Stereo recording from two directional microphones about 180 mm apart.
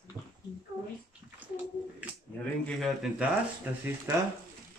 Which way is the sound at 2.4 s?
5° left (ahead or behind).